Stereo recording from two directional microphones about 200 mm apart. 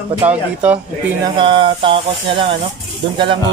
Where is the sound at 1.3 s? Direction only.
25° right (ahead or behind).